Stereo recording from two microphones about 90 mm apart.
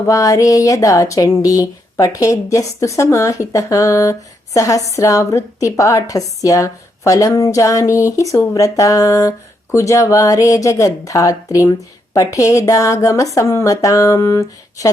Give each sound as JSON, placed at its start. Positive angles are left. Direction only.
{"t": 0.0, "sound": "speech", "side_deg": 40}